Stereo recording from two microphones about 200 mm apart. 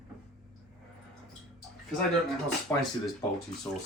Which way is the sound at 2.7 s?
10° left (ahead or behind).